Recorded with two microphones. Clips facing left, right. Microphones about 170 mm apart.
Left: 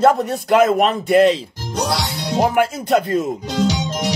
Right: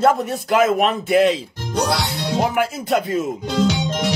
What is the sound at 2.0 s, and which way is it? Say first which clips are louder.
Music: even; 55° right (ahead or behind).